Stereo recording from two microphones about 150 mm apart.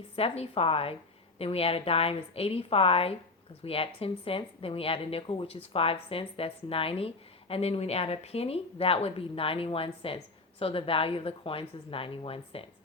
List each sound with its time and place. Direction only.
0.2 s a woman's voice: 40° left (ahead or behind)